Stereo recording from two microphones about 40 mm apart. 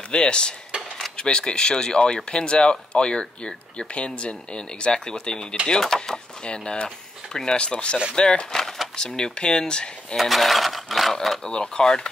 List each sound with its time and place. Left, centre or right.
0.1 s speech: left
10.1 s speech: centre
11.4 s speech: left